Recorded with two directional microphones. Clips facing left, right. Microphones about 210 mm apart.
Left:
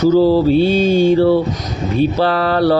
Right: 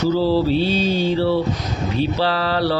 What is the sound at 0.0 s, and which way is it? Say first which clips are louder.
Speech: left 6 dB; 45° left (ahead or behind).